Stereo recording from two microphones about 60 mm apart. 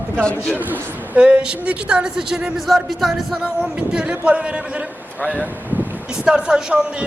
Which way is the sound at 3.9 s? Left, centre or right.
Centre.